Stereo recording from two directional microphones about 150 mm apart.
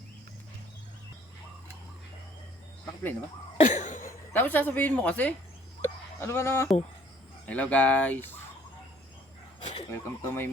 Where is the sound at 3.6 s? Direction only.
55° left (ahead or behind).